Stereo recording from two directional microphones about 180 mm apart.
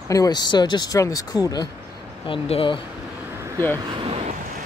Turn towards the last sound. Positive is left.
turn(degrees=-30)  # may be behind; listen again after turning